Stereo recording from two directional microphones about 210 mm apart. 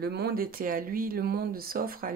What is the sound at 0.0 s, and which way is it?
Speech, 50° right (ahead or behind).